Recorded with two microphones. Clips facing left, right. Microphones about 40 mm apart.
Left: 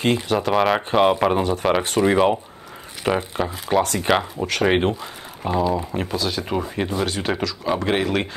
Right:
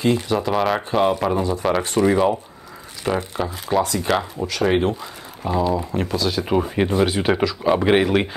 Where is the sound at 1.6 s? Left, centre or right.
Centre.